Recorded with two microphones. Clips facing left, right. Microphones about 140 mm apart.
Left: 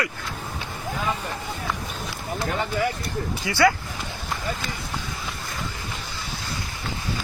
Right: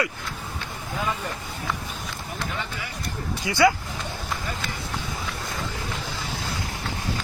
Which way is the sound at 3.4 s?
20° right (ahead or behind).